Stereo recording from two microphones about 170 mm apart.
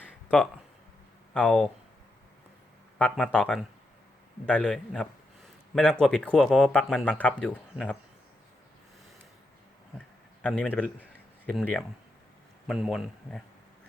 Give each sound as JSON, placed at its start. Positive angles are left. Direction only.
{"t": 0.0, "sound": "a sound", "side_deg": 5}
{"t": 1.3, "sound": "a man's voice", "side_deg": 5}
{"t": 3.0, "sound": "speech", "side_deg": 5}
{"t": 10.4, "sound": "a man's voice", "side_deg": 5}